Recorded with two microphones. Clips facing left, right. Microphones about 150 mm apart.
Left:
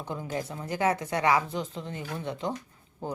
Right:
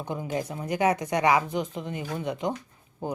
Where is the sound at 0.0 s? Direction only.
15° right (ahead or behind).